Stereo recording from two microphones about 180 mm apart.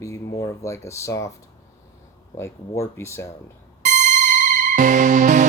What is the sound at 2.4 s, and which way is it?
Speech, 15° left (ahead or behind).